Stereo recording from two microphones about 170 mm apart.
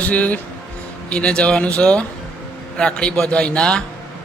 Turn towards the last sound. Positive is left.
turn(degrees=5)  # may be behind; listen again after turning